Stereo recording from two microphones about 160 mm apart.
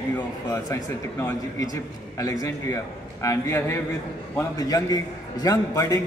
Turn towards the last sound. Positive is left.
turn(degrees=25)  # may be behind; listen again after turning